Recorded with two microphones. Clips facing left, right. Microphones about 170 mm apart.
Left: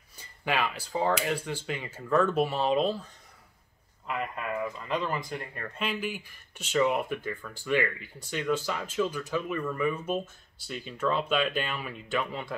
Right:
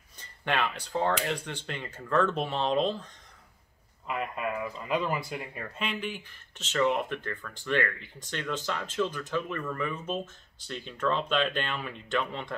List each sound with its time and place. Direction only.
0.2 s speech: 5° left (ahead or behind)
4.1 s speech: 5° right (ahead or behind)